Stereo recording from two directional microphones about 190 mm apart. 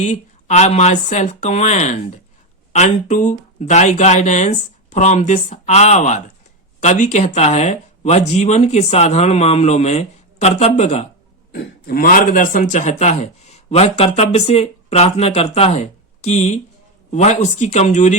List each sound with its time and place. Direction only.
0.0 s a man's voice: 40° left (ahead or behind)
11.9 s a man's voice: 50° left (ahead or behind)